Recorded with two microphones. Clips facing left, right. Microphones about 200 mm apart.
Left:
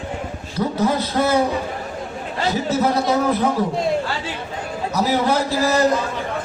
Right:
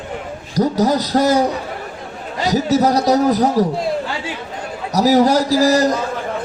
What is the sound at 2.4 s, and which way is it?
A man's voice, 40° right (ahead or behind).